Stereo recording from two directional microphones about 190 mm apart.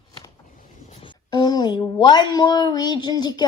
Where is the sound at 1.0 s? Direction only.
20° left (ahead or behind).